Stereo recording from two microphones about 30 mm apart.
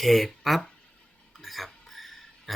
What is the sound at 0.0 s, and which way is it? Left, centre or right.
Speech, centre.